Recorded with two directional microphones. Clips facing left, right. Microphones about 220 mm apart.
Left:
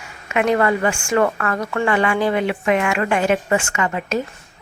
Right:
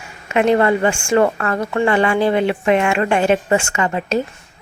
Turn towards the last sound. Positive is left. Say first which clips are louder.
# right 3 dB
turn(degrees=-30)  # may be behind; listen again after turning